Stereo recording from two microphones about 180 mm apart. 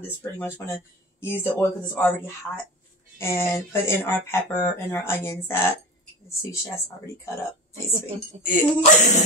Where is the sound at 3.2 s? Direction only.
15° left (ahead or behind).